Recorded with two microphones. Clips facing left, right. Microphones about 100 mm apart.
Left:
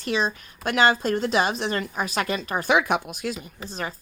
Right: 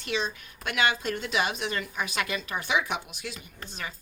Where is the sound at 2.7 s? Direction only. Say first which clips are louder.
Left 4 dB; 55° left (ahead or behind); by 3.9 s 35° left (ahead or behind).